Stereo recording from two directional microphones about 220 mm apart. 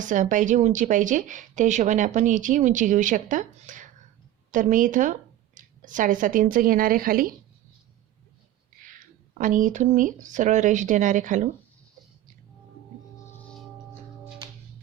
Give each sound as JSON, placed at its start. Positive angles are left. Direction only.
{"t": 0.0, "sound": "a woman's voice", "side_deg": -35}
{"t": 8.8, "sound": "speech", "side_deg": -40}